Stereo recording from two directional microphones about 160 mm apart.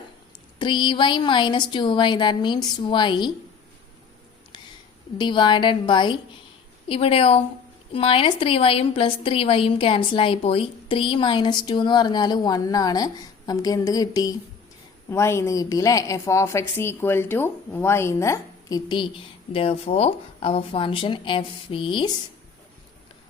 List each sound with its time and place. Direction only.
0.6 s a woman's voice: 30° left (ahead or behind)
5.1 s a woman's voice: 30° left (ahead or behind)